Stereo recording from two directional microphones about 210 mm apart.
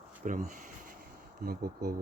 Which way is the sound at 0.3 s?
40° right (ahead or behind).